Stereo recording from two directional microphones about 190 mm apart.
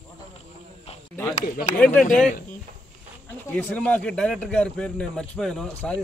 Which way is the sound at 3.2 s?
10° left (ahead or behind).